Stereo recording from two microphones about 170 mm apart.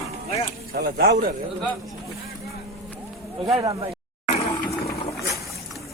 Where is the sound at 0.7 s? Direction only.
65° right (ahead or behind).